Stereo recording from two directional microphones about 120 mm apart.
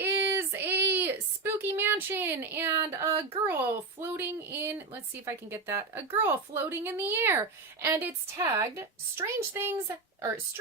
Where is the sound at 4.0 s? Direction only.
20° right (ahead or behind).